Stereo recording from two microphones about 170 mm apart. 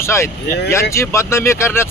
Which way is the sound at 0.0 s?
15° left (ahead or behind).